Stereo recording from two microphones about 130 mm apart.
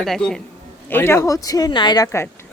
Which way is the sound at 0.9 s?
20° left (ahead or behind).